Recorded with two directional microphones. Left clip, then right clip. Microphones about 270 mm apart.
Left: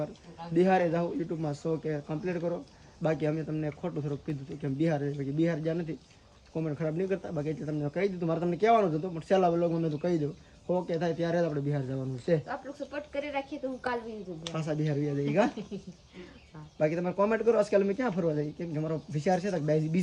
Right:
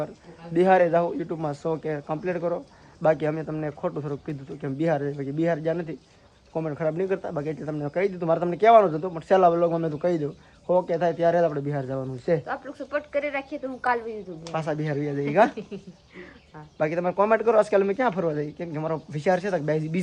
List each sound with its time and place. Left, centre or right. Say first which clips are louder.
0.5 s speech: right 7 dB; centre
13.1 s a woman's voice: right 3 dB; right
15.2 s speech: right 8 dB; centre
16.7 s speech: right 5 dB; centre